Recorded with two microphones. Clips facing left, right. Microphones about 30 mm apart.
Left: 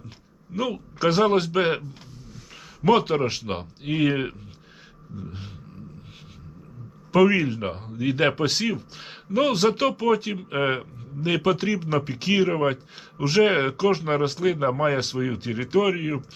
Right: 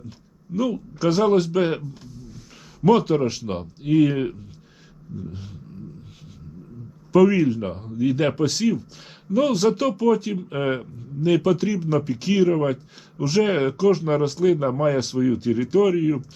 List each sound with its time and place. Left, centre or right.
0.5 s speech: left
7.1 s speech: left